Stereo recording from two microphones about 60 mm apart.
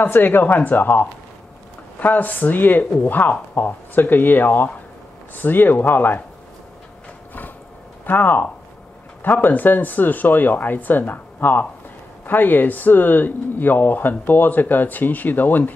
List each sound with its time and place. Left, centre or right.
0.0 s speech: left
8.0 s speech: left